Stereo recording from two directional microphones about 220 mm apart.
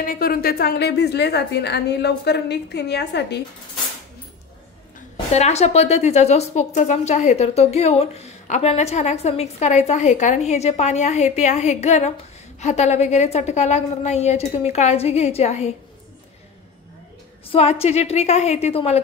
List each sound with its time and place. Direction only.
0.0 s a woman's voice: 40° left (ahead or behind)
5.3 s a woman's voice: 30° left (ahead or behind)
17.5 s a woman's voice: 25° left (ahead or behind)